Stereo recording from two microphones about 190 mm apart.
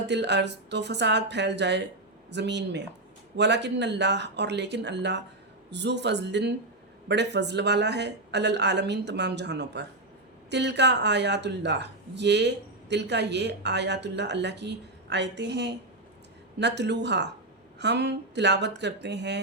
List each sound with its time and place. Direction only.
0.1 s speech: 65° right (ahead or behind)